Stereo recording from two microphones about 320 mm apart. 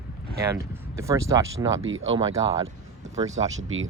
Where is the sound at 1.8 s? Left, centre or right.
Right.